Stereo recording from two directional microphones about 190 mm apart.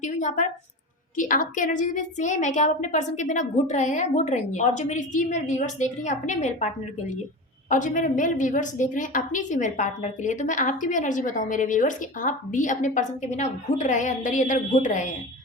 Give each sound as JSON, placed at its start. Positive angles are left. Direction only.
{"t": 0.0, "sound": "a woman's voice", "side_deg": 40}
{"t": 7.7, "sound": "a woman's voice", "side_deg": 40}